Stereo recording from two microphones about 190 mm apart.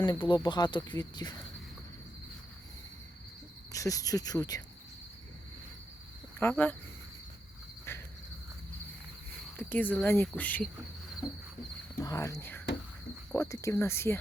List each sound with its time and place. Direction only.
0.0 s speech: 25° left (ahead or behind)
3.7 s speech: 15° left (ahead or behind)
6.4 s speech: 10° left (ahead or behind)
7.9 s cricket: 15° left (ahead or behind)
9.6 s speech: 10° left (ahead or behind)
11.2 s speech: 20° left (ahead or behind)